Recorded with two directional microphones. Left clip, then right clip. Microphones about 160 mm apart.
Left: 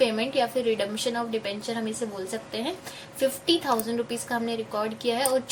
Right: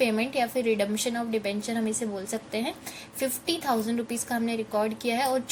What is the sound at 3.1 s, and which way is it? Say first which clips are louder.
A woman's voice: left 5 dB; 40° right (ahead or behind).